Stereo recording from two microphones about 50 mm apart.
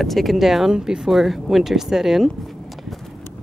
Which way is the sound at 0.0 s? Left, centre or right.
Centre.